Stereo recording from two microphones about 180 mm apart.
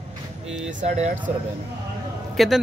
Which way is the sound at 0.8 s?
40° right (ahead or behind).